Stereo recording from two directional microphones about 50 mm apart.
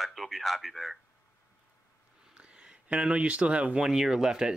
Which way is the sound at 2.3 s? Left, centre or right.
Right.